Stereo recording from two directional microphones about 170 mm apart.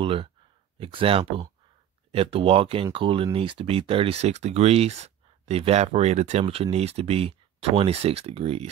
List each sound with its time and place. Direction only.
0.0 s speech: 30° right (ahead or behind)